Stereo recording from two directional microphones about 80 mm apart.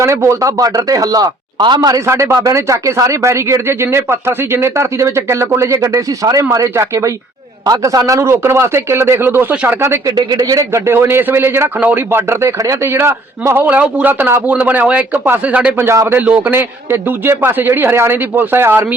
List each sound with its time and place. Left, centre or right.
0.0 s speech: right
2.0 s speech: right
10.1 s a man's voice: right